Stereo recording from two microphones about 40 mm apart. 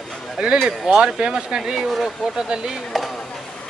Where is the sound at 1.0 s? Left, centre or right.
Right.